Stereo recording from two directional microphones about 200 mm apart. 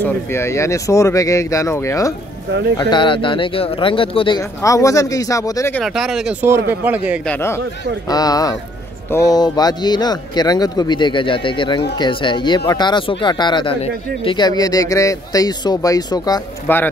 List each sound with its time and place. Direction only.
0.0 s speech: 15° left (ahead or behind)
5.8 s speech: centre (ahead or behind)
7.2 s speech: 10° left (ahead or behind)